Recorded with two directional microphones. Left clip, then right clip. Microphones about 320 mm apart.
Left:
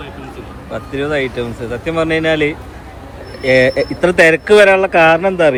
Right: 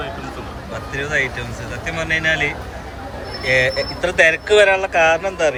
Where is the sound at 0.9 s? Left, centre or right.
Centre.